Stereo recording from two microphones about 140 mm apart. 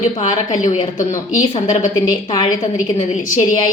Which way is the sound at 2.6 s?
60° left (ahead or behind).